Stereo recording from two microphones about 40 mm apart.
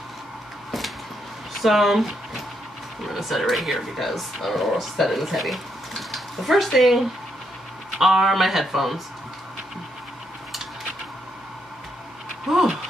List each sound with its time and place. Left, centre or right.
0.7 s a sound: centre
1.6 s speech: centre
3.1 s speech: centre
8.0 s speech: centre